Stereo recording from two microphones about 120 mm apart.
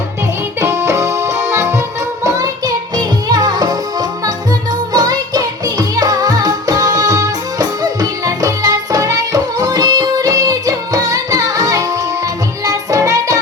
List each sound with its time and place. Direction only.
0.6 s music: 25° right (ahead or behind)
4.9 s music: 35° right (ahead or behind)